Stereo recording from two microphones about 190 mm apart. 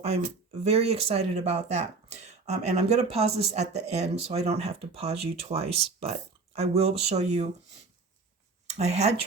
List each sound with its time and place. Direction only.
0.6 s speech: 35° right (ahead or behind)
8.8 s speech: 35° right (ahead or behind)